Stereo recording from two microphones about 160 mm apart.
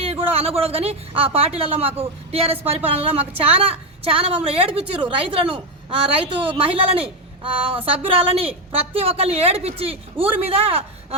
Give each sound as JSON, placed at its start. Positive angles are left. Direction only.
{"t": 0.0, "sound": "a woman's voice", "side_deg": -40}